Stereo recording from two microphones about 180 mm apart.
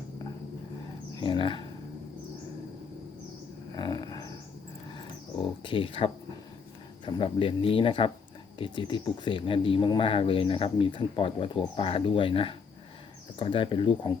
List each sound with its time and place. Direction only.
1.2 s speech: 30° left (ahead or behind)
3.8 s a sound: 20° left (ahead or behind)
5.6 s speech: 30° left (ahead or behind)